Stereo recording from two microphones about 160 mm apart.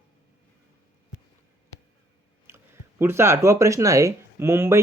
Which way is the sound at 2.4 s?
15° right (ahead or behind).